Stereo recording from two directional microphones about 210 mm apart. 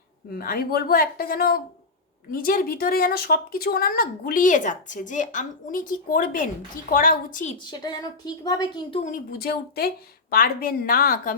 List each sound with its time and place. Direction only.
0.3 s a woman's voice: 45° left (ahead or behind)
7.7 s speech: 20° left (ahead or behind); by 11.3 s 45° left (ahead or behind)